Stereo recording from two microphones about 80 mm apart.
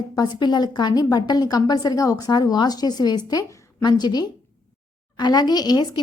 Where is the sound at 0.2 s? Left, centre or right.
Left.